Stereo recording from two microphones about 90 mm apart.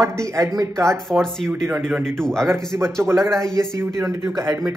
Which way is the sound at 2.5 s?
30° right (ahead or behind).